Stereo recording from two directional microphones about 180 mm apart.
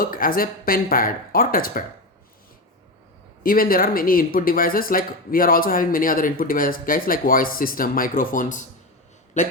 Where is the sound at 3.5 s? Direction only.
55° left (ahead or behind).